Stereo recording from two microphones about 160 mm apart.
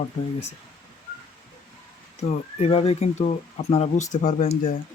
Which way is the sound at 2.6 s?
40° left (ahead or behind).